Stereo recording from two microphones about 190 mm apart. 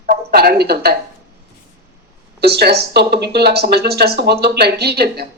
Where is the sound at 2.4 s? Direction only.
60° right (ahead or behind).